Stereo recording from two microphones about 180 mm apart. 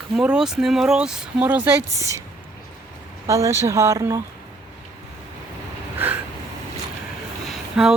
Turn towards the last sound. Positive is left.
turn(degrees=-5)  # may be behind; listen again after turning